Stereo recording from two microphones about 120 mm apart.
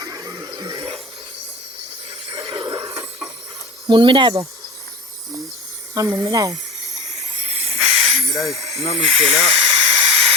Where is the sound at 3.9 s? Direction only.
40° right (ahead or behind).